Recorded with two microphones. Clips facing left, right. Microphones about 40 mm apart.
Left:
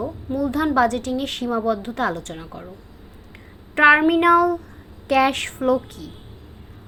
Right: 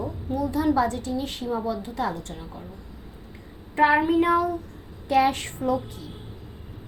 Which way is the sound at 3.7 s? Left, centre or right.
Left.